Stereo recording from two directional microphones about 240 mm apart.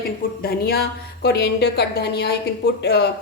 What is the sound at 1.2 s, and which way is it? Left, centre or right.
A woman's voice, left.